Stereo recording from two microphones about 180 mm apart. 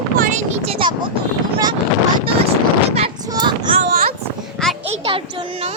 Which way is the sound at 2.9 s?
35° right (ahead or behind).